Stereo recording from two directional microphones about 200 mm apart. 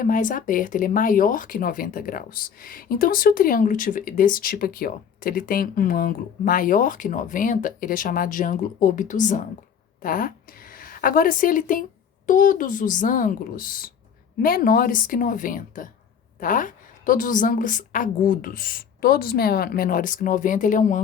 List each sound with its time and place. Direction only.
0.0 s a woman's voice: 40° left (ahead or behind)